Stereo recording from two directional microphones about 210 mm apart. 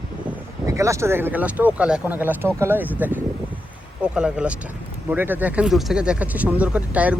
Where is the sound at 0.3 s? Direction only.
15° right (ahead or behind).